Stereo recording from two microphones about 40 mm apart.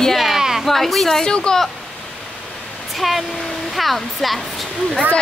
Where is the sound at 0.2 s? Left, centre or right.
Centre.